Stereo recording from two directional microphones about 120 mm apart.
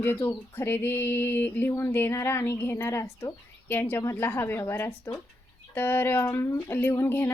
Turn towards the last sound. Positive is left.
turn(degrees=20)  # may be behind; listen again after turning